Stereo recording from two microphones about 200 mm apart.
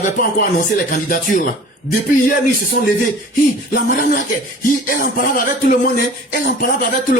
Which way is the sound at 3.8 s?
45° left (ahead or behind).